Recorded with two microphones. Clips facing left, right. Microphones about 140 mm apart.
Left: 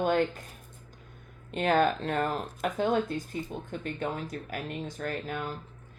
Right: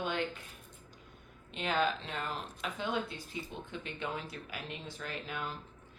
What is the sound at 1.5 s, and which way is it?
Speech, 50° left (ahead or behind).